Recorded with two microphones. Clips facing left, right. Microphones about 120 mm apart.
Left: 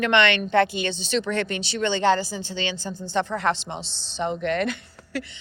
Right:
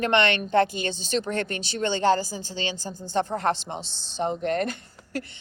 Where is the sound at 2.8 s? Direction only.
60° left (ahead or behind).